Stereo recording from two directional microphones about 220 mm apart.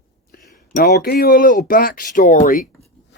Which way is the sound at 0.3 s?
45° left (ahead or behind).